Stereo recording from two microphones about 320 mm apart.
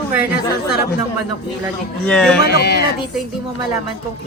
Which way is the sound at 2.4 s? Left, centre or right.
Left.